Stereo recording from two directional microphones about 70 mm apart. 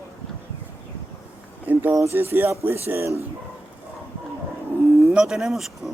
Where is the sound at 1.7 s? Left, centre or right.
Right.